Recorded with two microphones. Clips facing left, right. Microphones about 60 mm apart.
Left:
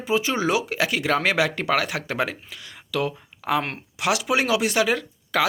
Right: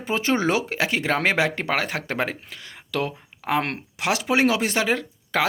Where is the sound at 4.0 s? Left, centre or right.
Right.